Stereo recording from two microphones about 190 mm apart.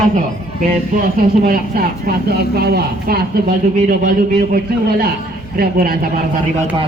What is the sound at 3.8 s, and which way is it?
Speech, 45° right (ahead or behind).